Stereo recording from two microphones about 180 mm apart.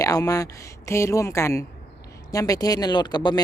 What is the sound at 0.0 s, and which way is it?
Speech, 20° left (ahead or behind).